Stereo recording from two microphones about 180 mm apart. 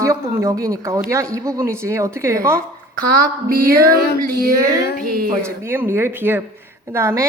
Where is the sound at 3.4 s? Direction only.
55° right (ahead or behind).